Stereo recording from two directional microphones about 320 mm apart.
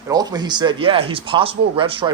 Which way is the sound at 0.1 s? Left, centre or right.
Centre.